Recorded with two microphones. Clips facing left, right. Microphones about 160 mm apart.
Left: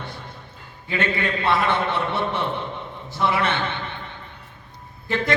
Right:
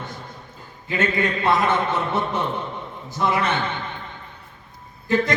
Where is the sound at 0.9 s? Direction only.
40° right (ahead or behind).